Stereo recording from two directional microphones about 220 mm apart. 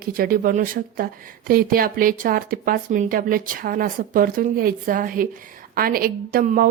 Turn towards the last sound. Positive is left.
turn(degrees=-40)  # may be behind; listen again after turning